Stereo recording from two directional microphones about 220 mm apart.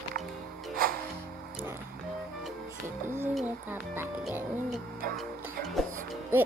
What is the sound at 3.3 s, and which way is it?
Music, 10° right (ahead or behind).